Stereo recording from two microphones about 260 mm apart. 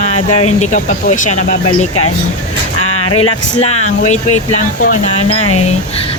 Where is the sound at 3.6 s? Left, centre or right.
Left.